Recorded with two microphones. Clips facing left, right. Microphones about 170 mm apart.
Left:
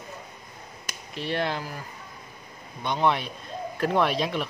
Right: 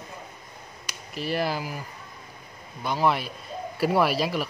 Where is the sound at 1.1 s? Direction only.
5° right (ahead or behind).